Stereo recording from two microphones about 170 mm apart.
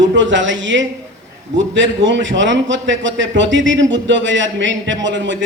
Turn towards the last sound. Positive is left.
turn(degrees=-90)